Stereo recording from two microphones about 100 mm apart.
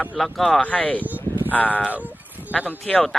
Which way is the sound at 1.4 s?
15° left (ahead or behind).